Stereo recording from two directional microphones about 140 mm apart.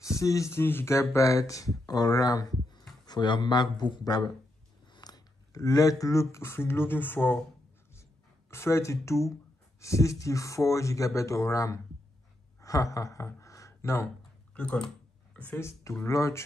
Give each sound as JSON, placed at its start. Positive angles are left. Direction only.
{"t": 0.2, "sound": "speech", "side_deg": 20}
{"t": 8.5, "sound": "speech", "side_deg": 20}
{"t": 12.5, "sound": "a sound", "side_deg": 25}
{"t": 14.5, "sound": "speech", "side_deg": 10}